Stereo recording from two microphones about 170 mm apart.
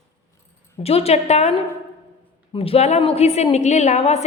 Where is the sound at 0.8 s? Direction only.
35° left (ahead or behind).